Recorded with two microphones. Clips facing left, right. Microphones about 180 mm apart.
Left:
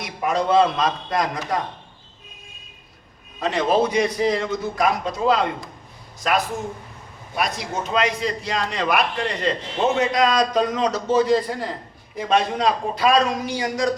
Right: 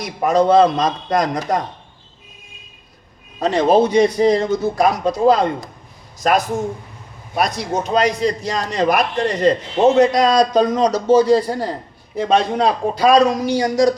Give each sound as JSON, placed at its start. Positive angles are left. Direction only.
{"t": 0.0, "sound": "a man's voice", "side_deg": -40}
{"t": 3.4, "sound": "a man's voice", "side_deg": -35}
{"t": 7.3, "sound": "a man's voice", "side_deg": -35}